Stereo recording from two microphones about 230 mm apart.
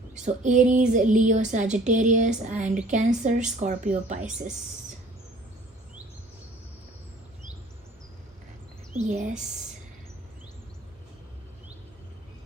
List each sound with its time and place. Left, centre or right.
0.1 s speech: right
8.9 s speech: right